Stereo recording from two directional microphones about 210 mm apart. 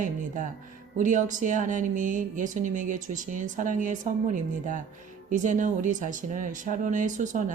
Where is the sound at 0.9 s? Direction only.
35° right (ahead or behind).